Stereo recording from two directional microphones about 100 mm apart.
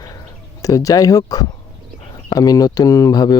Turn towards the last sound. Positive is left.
turn(degrees=40)  # may be behind; listen again after turning